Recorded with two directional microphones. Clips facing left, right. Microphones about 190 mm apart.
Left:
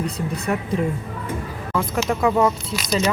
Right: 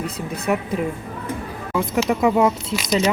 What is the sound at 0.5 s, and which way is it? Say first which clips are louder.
Speech: right 3 dB; 10° right (ahead or behind).